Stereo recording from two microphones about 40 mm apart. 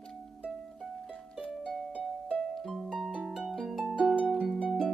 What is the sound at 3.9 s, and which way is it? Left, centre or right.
Harp, right.